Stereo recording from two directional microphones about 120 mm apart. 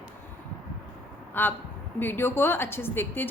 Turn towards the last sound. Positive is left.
turn(degrees=15)  # may be behind; listen again after turning